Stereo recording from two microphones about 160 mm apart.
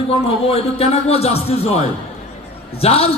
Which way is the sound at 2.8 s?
40° left (ahead or behind).